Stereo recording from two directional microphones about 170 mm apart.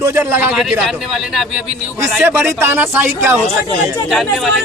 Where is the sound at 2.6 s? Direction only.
15° right (ahead or behind).